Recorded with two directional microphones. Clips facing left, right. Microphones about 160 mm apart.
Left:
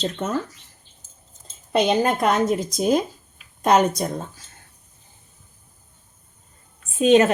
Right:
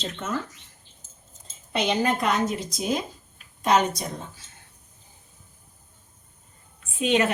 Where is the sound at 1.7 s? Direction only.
45° left (ahead or behind).